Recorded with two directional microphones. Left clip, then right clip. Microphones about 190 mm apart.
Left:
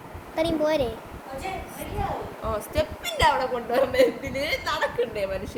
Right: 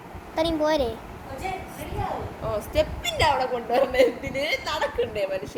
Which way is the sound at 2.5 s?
25° left (ahead or behind).